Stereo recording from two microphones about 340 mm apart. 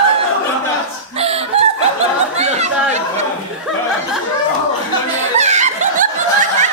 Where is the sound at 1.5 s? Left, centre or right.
Centre.